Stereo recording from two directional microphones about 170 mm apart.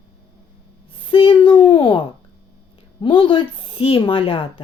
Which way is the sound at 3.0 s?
30° left (ahead or behind).